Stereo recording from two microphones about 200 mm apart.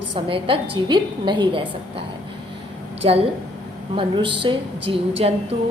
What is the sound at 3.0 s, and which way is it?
A woman's voice, 30° right (ahead or behind).